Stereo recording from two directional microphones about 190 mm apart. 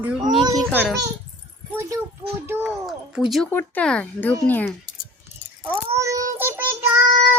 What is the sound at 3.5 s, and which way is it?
Speech, 10° left (ahead or behind).